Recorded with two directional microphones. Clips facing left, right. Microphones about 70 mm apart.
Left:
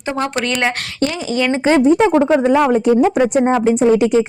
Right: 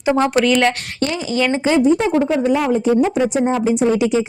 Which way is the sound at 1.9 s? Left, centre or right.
Left.